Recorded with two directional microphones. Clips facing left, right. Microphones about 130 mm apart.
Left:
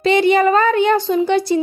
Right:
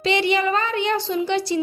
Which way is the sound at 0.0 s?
45° left (ahead or behind).